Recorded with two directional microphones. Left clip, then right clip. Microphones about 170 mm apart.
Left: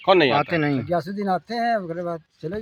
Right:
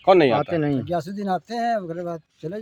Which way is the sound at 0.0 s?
90° right.